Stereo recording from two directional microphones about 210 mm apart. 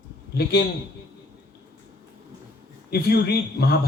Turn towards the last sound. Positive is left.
turn(degrees=50)  # may be behind; listen again after turning